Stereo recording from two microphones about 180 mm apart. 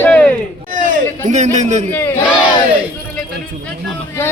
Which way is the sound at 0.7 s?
45° right (ahead or behind).